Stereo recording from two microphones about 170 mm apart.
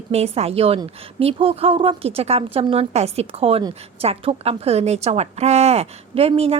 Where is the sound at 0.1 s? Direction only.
40° right (ahead or behind).